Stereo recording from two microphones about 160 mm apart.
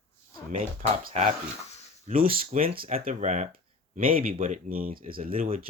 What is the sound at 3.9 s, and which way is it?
Speech, 60° right (ahead or behind).